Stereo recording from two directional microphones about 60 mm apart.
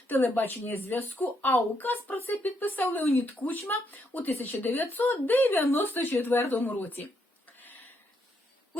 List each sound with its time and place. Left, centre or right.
0.1 s speech: left